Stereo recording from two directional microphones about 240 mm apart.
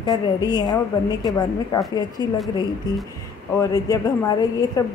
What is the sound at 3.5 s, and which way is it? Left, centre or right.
A woman's voice, centre.